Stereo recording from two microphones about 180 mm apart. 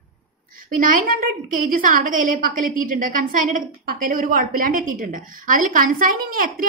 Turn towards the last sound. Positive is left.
turn(degrees=-50)  # may be behind; listen again after turning